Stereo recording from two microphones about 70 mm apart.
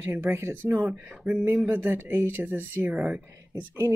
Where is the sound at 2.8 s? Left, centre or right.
Centre.